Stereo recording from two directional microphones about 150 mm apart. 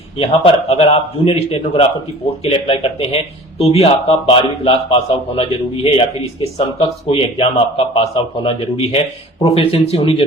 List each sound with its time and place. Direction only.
0.2 s a man's voice: 40° left (ahead or behind)